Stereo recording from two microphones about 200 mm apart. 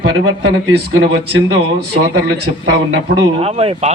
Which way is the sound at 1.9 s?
55° right (ahead or behind).